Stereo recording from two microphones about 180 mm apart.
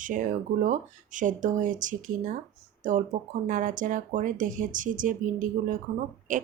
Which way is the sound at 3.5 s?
45° right (ahead or behind).